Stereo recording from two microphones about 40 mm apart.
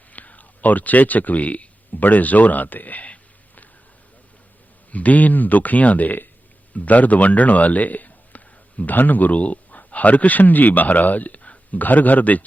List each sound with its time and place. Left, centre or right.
0.1 s speech: left
4.9 s a man's voice: left